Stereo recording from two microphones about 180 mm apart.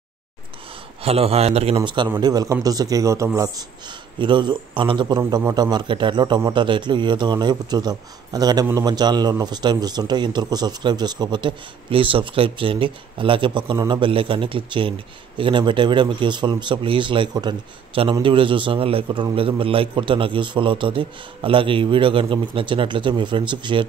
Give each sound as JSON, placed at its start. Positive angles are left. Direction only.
{"t": 1.0, "sound": "a man's voice", "side_deg": -35}